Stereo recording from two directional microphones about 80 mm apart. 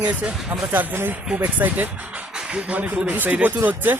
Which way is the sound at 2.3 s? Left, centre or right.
Centre.